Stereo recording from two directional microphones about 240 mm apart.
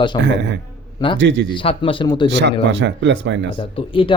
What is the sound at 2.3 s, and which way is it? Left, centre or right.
Speech, right.